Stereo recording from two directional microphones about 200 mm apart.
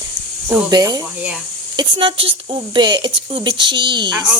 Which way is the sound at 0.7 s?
20° right (ahead or behind).